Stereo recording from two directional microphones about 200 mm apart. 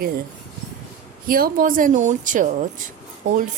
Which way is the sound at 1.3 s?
45° right (ahead or behind).